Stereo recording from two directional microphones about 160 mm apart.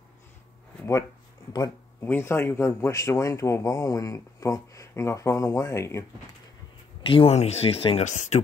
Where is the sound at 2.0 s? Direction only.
15° left (ahead or behind).